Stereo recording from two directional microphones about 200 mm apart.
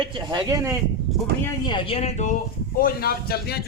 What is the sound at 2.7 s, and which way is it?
Speech, 50° left (ahead or behind).